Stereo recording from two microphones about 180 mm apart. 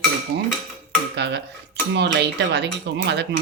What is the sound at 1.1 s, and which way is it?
Speech, 70° right (ahead or behind).